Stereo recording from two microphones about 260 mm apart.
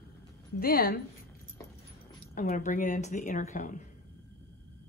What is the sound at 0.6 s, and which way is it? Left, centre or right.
Speech, left.